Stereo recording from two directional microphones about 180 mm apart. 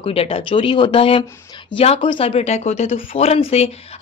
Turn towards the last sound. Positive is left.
turn(degrees=35)  # may be behind; listen again after turning